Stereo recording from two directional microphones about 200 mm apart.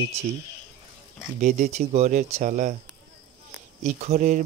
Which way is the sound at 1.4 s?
40° right (ahead or behind).